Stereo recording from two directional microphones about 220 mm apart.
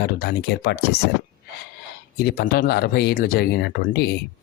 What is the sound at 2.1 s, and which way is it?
Speech, 45° left (ahead or behind).